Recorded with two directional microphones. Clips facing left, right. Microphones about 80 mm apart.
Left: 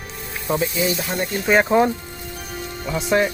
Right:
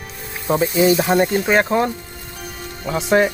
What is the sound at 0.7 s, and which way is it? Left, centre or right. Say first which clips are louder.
Speech: right 8 dB; right.